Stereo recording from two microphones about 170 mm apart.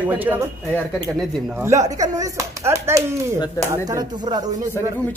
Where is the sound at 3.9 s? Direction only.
25° right (ahead or behind).